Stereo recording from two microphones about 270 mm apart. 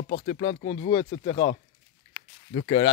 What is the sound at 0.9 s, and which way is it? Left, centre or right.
Speech, centre.